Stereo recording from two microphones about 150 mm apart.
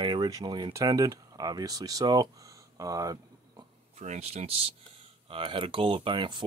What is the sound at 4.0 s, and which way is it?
Speech, 45° right (ahead or behind).